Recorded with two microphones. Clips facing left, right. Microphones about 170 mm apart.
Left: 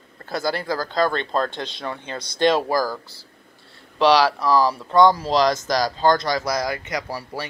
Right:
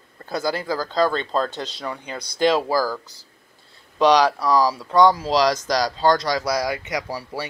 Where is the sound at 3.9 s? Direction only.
15° right (ahead or behind).